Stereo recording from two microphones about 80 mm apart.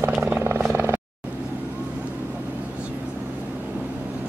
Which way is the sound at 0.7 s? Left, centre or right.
Right.